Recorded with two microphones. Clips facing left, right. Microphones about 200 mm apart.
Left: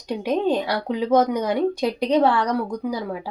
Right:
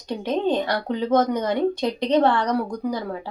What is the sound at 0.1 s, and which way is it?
Speech, 10° left (ahead or behind).